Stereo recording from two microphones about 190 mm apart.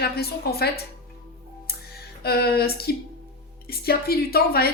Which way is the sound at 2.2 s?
55° left (ahead or behind).